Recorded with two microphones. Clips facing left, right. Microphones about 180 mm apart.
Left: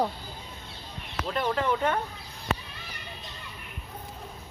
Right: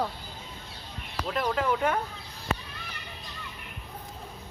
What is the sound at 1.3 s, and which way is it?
Speech, centre (ahead or behind).